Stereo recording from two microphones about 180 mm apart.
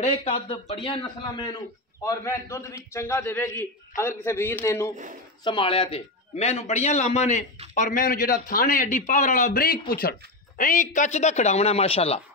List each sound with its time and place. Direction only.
0.0 s a man's voice: 35° left (ahead or behind); by 4.9 s 15° left (ahead or behind)
5.4 s a man's voice: 25° left (ahead or behind)